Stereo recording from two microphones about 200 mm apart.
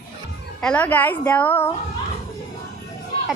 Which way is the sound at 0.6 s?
5° left (ahead or behind).